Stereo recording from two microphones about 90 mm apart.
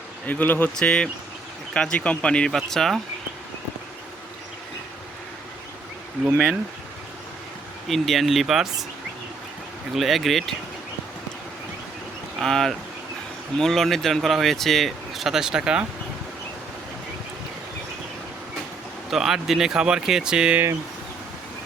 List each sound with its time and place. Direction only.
0.3 s speech: 20° left (ahead or behind)
7.9 s speech: centre (ahead or behind)
9.9 s speech: centre (ahead or behind)
12.4 s speech: 5° left (ahead or behind)
19.1 s speech: 5° right (ahead or behind)